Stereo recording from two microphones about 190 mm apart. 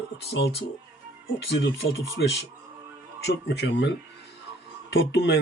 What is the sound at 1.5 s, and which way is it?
Speech, 65° left (ahead or behind).